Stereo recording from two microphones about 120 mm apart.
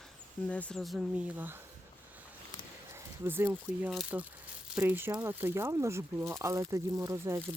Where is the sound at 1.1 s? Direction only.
15° right (ahead or behind).